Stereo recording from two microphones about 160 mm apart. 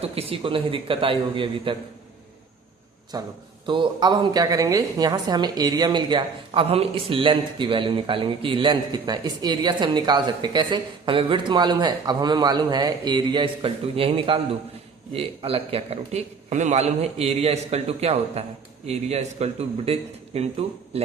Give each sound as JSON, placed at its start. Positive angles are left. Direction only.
{"t": 0.0, "sound": "a man's voice", "side_deg": -35}
{"t": 3.1, "sound": "a woman's voice", "side_deg": -25}